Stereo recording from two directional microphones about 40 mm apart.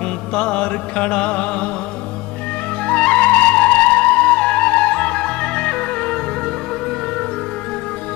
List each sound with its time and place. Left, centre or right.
0.3 s music: left
2.9 s music: left